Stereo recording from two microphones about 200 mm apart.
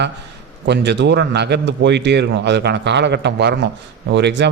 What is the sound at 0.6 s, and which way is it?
A man's voice, 60° right (ahead or behind).